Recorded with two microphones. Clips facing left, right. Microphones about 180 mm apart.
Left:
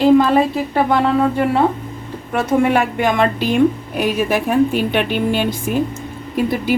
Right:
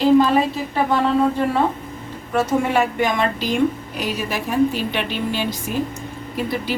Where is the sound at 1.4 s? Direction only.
65° left (ahead or behind).